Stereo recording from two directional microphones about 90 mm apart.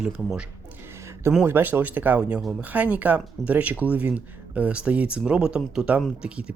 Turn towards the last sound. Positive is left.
turn(degrees=-10)  # may be behind; listen again after turning